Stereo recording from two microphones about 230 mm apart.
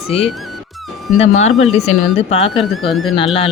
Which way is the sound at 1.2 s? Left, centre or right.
Left.